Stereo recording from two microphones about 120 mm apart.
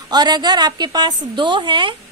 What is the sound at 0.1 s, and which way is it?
A woman's voice, 35° right (ahead or behind).